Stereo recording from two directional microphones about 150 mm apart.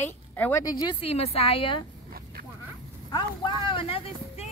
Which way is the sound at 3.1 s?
30° left (ahead or behind).